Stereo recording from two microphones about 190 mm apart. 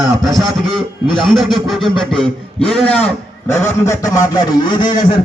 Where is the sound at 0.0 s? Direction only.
Centre (ahead or behind); by 4.9 s 25° left (ahead or behind).